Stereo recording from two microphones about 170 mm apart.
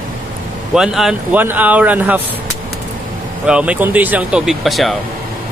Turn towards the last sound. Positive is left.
turn(degrees=0)  # may be behind; listen again after turning